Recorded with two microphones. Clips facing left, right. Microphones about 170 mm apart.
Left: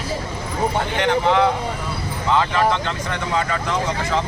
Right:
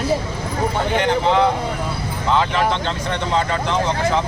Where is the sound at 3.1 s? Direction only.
25° right (ahead or behind).